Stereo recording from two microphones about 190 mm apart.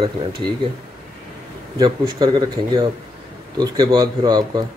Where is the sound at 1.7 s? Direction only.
20° right (ahead or behind).